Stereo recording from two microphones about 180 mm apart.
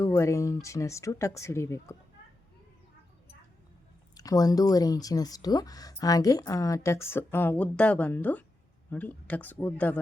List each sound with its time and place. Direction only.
0.0 s speech: 15° left (ahead or behind)
4.1 s speech: 20° left (ahead or behind)